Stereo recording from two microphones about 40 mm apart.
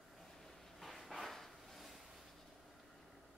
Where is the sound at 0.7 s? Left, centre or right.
Centre.